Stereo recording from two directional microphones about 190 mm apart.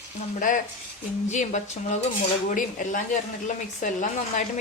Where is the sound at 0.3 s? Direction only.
45° left (ahead or behind).